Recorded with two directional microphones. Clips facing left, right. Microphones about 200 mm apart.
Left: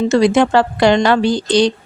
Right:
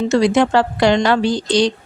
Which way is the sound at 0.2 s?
60° left (ahead or behind).